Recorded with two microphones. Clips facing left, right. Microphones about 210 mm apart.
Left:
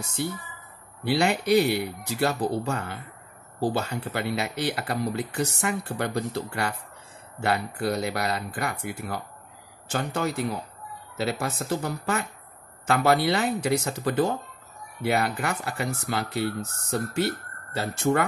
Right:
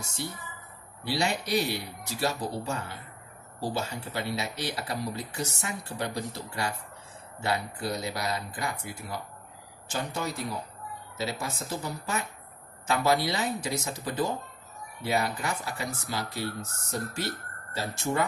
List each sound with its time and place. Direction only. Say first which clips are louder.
1.0 s speech: left 6 dB; 60° left (ahead or behind)